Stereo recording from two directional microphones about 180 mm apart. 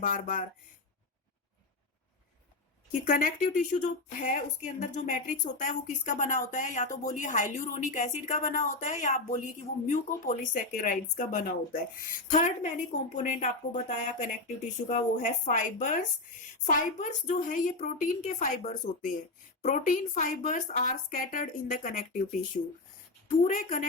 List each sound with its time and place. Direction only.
0.0 s speech: 50° left (ahead or behind)
2.9 s speech: 50° left (ahead or behind)